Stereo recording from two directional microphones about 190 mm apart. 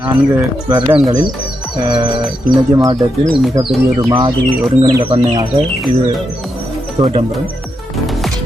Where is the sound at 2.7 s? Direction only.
20° right (ahead or behind).